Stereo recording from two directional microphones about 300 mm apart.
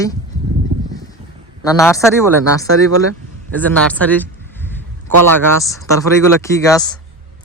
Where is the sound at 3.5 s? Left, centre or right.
Centre.